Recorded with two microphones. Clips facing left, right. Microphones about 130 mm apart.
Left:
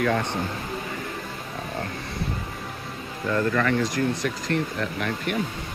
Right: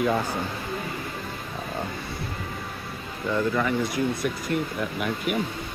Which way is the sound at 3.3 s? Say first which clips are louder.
Left 1 dB; 10° right (ahead or behind).